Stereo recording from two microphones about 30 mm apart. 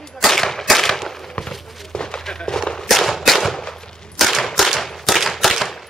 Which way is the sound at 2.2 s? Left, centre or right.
Left.